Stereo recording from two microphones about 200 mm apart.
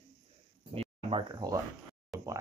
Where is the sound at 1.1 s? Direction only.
20° right (ahead or behind).